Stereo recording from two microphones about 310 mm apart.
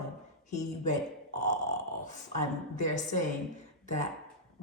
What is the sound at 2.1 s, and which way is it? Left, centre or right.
A man's voice, left.